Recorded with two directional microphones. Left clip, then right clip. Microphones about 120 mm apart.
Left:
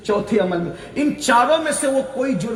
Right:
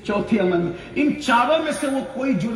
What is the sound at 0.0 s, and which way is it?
Speech, 35° left (ahead or behind).